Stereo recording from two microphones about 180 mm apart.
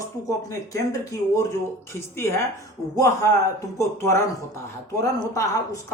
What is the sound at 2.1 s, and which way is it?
Speech, 15° left (ahead or behind).